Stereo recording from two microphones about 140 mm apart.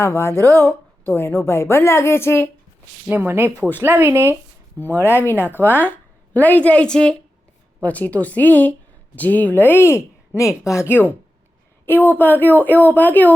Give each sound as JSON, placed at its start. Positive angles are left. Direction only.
{"t": 0.0, "sound": "a woman's voice", "side_deg": 20}
{"t": 3.1, "sound": "speech", "side_deg": -15}
{"t": 4.8, "sound": "a woman's voice", "side_deg": 15}